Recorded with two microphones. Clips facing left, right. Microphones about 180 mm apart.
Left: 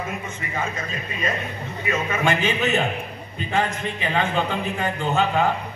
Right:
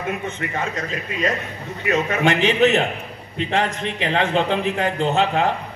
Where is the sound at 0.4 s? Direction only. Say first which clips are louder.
Right 3 dB; 70° right (ahead or behind).